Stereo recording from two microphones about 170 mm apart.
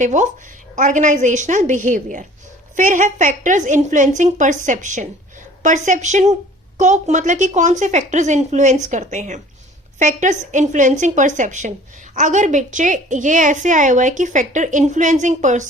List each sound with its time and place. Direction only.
0.0 s a woman's voice: 45° right (ahead or behind)